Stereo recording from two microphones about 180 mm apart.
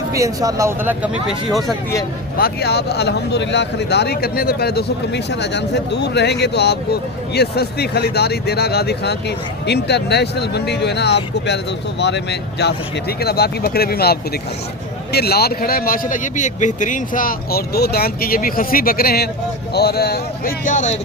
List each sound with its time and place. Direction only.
0.1 s speech: 20° right (ahead or behind); by 1.7 s centre (ahead or behind)
2.4 s speech: 65° left (ahead or behind); by 21.0 s 45° left (ahead or behind)